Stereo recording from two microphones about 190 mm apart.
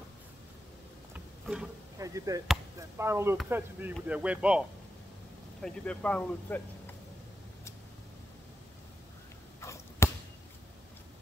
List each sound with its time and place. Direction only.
1.1 s a sound: 5° right (ahead or behind)
2.0 s speech: 20° right (ahead or behind)
5.6 s speech: 5° left (ahead or behind)
9.6 s arrow: 15° left (ahead or behind)